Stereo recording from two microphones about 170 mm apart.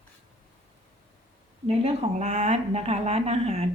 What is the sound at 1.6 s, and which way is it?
Speech, 40° right (ahead or behind).